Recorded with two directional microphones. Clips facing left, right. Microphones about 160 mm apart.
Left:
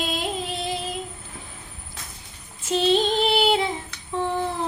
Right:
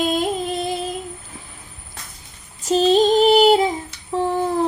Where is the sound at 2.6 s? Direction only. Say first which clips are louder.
Right 6 dB; 40° right (ahead or behind).